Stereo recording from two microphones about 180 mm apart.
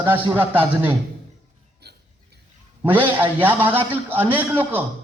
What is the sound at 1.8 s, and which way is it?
Hiccup, 65° right (ahead or behind).